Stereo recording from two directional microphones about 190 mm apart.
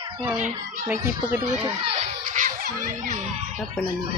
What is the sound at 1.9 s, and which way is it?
Music, 40° right (ahead or behind).